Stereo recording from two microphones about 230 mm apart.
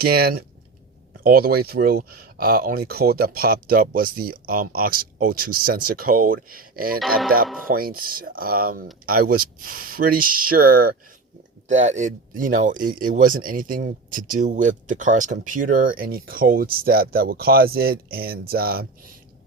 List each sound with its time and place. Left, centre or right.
0.0 s speech: right